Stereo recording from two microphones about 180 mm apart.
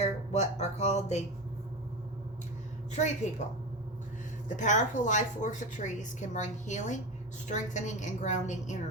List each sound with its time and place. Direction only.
0.0 s music: 40° left (ahead or behind)
2.9 s a woman's voice: 40° left (ahead or behind)
4.4 s a woman's voice: 45° left (ahead or behind)